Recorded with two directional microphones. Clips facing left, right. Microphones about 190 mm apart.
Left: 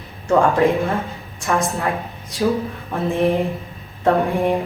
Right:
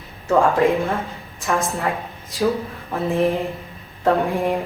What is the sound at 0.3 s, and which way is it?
Speech, centre (ahead or behind).